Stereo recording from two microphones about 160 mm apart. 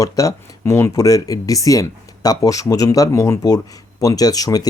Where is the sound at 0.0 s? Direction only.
20° left (ahead or behind).